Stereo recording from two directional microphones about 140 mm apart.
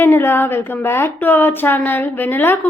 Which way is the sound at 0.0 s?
15° left (ahead or behind).